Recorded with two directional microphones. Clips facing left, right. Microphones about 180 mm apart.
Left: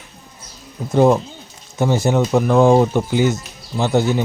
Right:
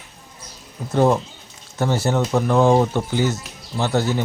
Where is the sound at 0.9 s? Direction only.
15° left (ahead or behind).